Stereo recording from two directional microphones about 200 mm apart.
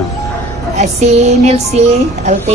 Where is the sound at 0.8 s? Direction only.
35° right (ahead or behind).